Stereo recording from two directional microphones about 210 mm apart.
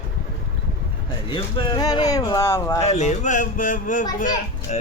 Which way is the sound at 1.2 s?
20° left (ahead or behind).